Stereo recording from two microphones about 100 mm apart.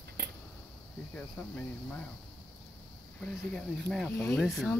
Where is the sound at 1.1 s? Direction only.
15° left (ahead or behind).